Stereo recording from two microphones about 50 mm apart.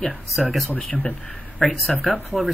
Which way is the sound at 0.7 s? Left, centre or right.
Left.